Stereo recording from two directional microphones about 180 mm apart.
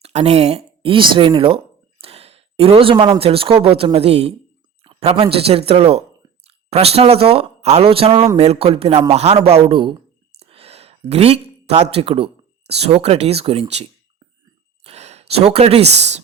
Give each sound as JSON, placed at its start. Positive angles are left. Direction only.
{"t": 0.0, "sound": "speech", "side_deg": -35}
{"t": 14.8, "sound": "speech", "side_deg": -35}